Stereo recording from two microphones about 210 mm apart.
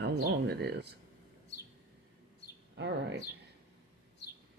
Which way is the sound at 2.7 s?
55° right (ahead or behind).